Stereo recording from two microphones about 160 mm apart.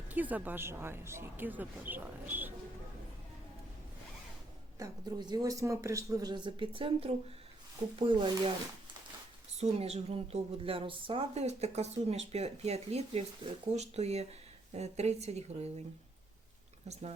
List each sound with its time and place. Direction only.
0.1 s a woman's voice: 10° right (ahead or behind)
4.8 s speech: 25° right (ahead or behind)
9.6 s a woman's voice: 40° right (ahead or behind)